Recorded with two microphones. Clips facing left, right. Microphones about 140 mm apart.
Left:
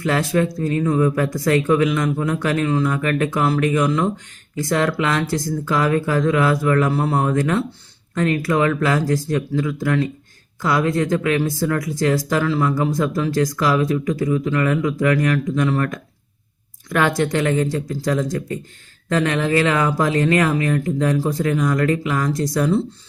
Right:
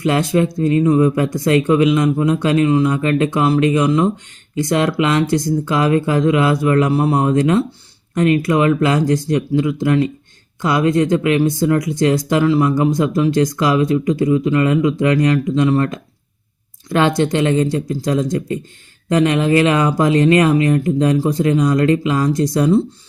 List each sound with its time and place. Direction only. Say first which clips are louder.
0.0 s speech: right 3 dB; 20° right (ahead or behind)